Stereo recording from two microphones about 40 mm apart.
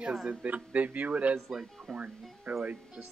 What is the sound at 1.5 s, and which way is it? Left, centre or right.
Speech, centre.